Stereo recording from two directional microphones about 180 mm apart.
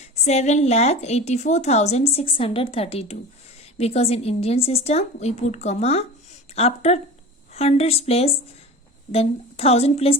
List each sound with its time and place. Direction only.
0.3 s a woman's voice: 40° left (ahead or behind)